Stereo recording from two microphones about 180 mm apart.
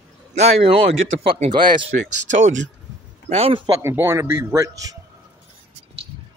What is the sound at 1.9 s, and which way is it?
Speech, 55° right (ahead or behind).